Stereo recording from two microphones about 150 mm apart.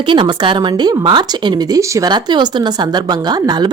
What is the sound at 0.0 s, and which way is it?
A woman's voice, 30° right (ahead or behind).